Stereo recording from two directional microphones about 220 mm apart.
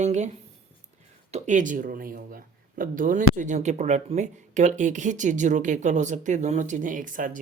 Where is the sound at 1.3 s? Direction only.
35° right (ahead or behind).